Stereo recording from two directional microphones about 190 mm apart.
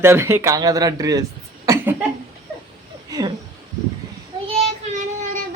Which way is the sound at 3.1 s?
20° right (ahead or behind).